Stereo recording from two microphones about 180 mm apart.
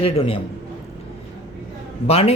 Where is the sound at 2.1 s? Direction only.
35° left (ahead or behind).